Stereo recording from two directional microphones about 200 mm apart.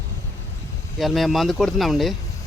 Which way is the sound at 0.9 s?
Centre (ahead or behind).